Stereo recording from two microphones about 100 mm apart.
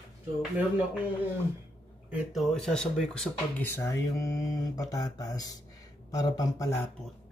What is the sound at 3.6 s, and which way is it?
Speech, 25° left (ahead or behind).